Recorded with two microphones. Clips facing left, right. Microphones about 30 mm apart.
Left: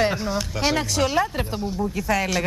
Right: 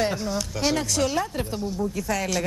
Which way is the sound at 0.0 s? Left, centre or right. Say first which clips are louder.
Left 3 dB; centre.